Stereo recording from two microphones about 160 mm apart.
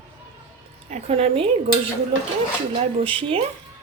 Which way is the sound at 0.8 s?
40° right (ahead or behind).